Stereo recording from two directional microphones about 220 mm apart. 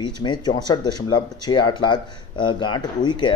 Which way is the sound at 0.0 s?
20° left (ahead or behind).